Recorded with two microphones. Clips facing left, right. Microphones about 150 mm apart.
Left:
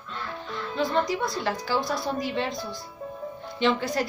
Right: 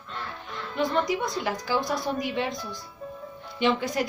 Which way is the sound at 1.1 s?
15° right (ahead or behind).